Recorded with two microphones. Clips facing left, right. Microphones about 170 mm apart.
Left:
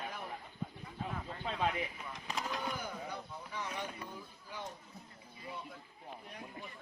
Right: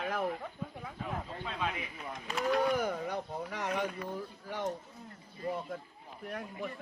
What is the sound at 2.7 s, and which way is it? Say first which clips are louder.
Speech: right 9 dB; 80° right.